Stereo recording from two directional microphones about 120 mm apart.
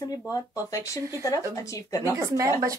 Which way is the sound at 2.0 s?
25° right (ahead or behind).